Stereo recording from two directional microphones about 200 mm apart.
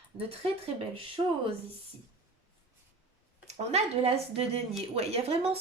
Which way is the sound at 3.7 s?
30° right (ahead or behind).